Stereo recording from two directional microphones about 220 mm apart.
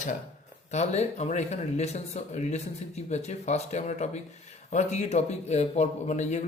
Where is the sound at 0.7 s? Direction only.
30° left (ahead or behind).